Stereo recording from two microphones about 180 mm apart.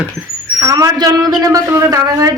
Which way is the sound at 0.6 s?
20° right (ahead or behind).